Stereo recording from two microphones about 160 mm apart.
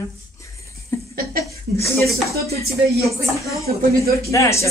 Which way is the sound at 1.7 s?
15° left (ahead or behind).